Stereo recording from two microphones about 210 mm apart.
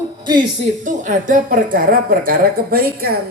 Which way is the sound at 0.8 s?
40° right (ahead or behind).